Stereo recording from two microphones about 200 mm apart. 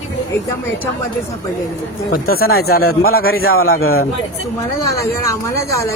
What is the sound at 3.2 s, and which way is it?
Speech, 90° left.